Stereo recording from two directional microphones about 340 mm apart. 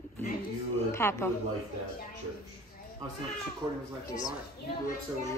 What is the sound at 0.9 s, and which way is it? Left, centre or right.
Speech, centre.